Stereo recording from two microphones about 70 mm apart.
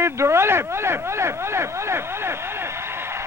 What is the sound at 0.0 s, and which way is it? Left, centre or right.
Speech, right.